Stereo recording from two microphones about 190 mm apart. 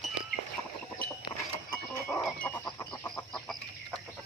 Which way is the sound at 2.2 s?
10° left (ahead or behind).